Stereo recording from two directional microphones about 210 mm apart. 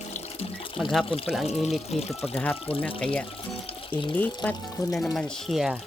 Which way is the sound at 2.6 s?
25° left (ahead or behind).